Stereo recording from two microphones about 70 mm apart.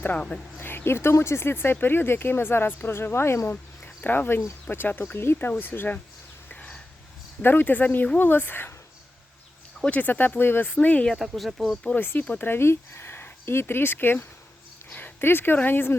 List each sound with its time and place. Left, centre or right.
0.6 s speech: left
3.5 s insect: left
4.7 s speech: left
6.5 s a sound: centre
7.4 s speech: left
9.8 s speech: left
11.1 s speech: centre
11.9 s speech: left